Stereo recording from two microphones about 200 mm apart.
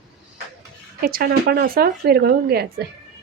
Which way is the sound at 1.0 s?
45° right (ahead or behind).